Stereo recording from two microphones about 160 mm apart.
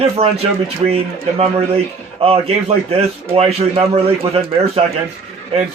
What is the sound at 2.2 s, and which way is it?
Speech, 35° right (ahead or behind).